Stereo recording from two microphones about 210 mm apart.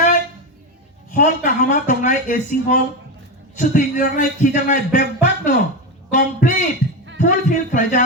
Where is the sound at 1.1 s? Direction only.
40° left (ahead or behind).